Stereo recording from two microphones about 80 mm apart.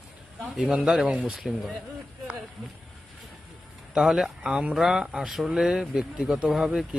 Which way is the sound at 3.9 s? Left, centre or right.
Centre.